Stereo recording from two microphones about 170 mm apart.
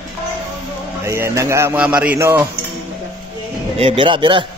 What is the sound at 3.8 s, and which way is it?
Speech, 30° right (ahead or behind).